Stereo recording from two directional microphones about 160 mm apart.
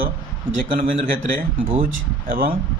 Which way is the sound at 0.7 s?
55° right (ahead or behind).